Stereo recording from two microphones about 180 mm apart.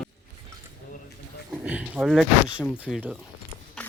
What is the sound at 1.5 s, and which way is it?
A man's voice, 5° right (ahead or behind).